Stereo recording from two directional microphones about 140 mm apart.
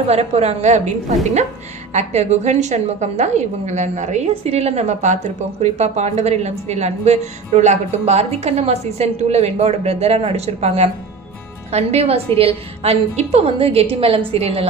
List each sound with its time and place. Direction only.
0.1 s a woman's voice: 50° right (ahead or behind)